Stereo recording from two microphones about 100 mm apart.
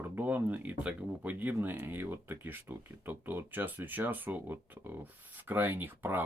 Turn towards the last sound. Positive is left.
turn(degrees=-20)  # may be behind; listen again after turning